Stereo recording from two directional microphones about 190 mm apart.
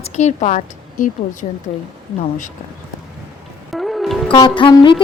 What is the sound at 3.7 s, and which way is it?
Music, centre (ahead or behind).